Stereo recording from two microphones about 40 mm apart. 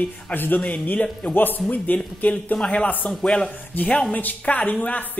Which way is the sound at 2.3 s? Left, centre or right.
Left.